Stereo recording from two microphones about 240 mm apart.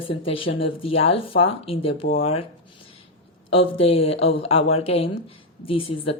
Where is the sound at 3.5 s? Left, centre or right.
Left.